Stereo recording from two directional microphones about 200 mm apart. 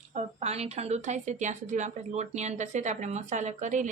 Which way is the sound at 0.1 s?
35° right (ahead or behind).